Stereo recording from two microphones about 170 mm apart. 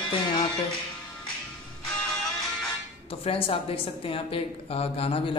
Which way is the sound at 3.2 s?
35° left (ahead or behind).